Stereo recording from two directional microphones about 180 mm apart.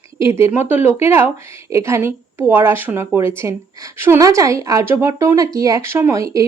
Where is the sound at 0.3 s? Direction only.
15° right (ahead or behind).